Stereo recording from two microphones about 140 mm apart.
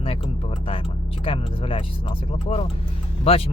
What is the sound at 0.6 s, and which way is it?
Speech, 40° left (ahead or behind).